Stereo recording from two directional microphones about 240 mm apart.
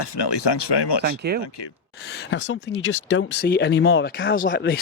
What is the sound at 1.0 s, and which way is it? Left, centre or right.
Speech, right.